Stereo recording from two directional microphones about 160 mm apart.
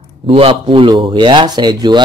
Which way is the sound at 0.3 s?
35° right (ahead or behind).